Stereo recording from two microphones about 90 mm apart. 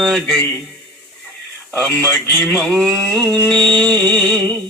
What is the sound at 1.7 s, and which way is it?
Speech, 20° left (ahead or behind).